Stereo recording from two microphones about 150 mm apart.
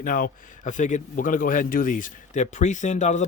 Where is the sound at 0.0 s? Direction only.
65° left (ahead or behind).